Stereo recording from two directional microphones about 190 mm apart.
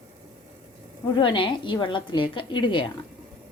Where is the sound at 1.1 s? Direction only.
25° left (ahead or behind).